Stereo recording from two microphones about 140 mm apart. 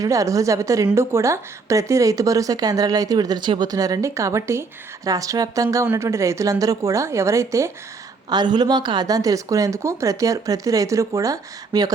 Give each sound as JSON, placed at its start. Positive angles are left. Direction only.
{"t": 0.0, "sound": "speech", "side_deg": -25}
{"t": 8.3, "sound": "speech", "side_deg": -30}